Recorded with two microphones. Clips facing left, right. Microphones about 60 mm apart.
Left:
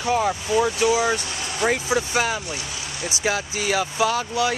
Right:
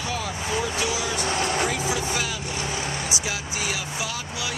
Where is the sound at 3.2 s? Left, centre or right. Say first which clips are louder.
Left 5 dB; left.